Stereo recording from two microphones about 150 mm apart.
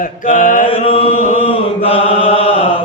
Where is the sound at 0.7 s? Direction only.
40° left (ahead or behind).